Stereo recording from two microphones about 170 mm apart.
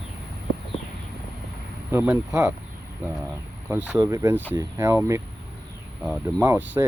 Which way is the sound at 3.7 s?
10° right (ahead or behind).